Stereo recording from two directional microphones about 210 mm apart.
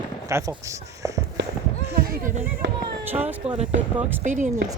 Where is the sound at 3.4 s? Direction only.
30° right (ahead or behind).